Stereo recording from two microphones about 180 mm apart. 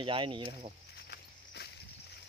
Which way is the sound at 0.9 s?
65° left (ahead or behind).